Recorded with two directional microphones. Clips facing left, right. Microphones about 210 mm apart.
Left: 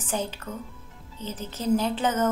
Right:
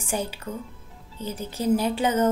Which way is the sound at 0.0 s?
10° right (ahead or behind).